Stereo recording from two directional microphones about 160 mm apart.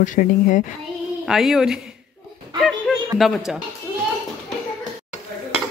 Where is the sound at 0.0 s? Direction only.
55° left (ahead or behind).